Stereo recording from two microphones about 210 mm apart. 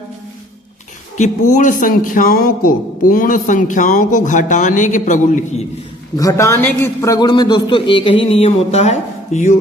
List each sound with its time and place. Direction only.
1.1 s a man's voice: 35° left (ahead or behind)
6.1 s a man's voice: 15° left (ahead or behind); by 9.6 s 35° left (ahead or behind)